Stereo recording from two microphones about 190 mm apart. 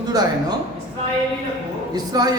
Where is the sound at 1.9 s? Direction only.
20° right (ahead or behind).